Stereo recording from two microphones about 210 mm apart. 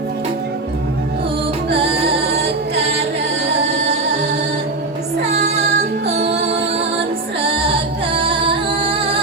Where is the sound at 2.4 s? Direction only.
30° right (ahead or behind).